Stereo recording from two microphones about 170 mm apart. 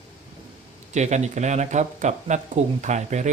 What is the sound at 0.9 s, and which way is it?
Speech, 45° right (ahead or behind).